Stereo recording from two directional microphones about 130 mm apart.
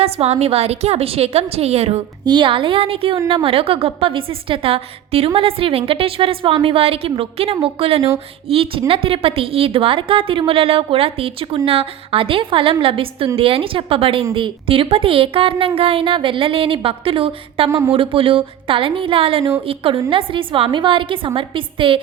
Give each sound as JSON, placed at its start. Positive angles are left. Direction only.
{"t": 0.0, "sound": "a woman's voice", "side_deg": -55}
{"t": 2.2, "sound": "a woman's voice", "side_deg": -35}
{"t": 17.7, "sound": "speech", "side_deg": -20}
{"t": 17.9, "sound": "a woman's voice", "side_deg": -45}